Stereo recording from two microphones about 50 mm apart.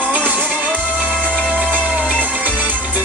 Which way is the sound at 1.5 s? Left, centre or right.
Right.